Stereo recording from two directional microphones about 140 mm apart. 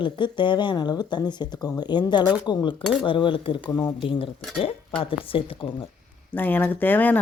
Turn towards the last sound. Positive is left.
turn(degrees=15)  # may be behind; listen again after turning